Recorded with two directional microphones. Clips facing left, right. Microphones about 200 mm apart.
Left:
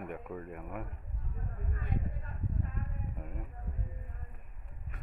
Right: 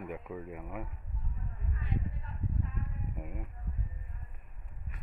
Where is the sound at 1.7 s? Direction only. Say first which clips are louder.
Right 1 dB; 50° left (ahead or behind).